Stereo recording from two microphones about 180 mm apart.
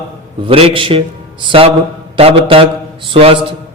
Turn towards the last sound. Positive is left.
turn(degrees=-30)  # may be behind; listen again after turning